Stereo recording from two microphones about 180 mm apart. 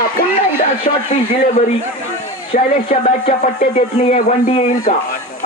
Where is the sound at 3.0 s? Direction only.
40° left (ahead or behind).